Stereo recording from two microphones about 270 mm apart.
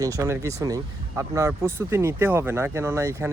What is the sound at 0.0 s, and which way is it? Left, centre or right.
Speech, centre.